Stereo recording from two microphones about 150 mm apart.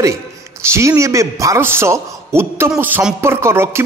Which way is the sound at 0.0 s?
20° right (ahead or behind).